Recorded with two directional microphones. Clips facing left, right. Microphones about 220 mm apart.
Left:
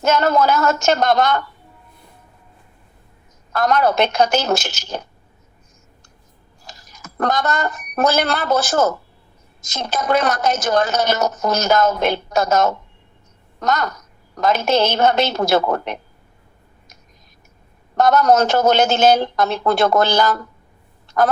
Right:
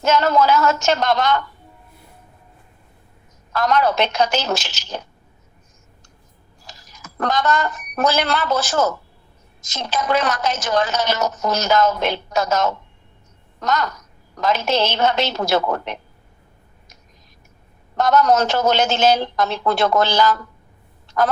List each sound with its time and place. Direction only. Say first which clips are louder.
0.0 s a woman's voice: left 1 dB; 45° left (ahead or behind)
3.5 s a woman's voice: left 1 dB; 50° left (ahead or behind)
6.7 s a woman's voice: left 2 dB; 45° left (ahead or behind)
17.9 s a woman's voice: left 2 dB; 45° left (ahead or behind)